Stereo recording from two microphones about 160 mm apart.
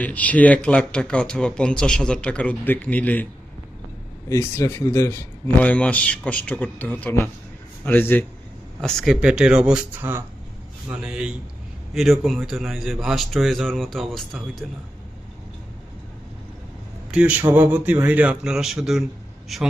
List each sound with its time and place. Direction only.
0.0 s speech: 10° left (ahead or behind)
4.3 s speech: 15° left (ahead or behind)
8.8 s a man's voice: centre (ahead or behind)
17.1 s a man's voice: 10° right (ahead or behind)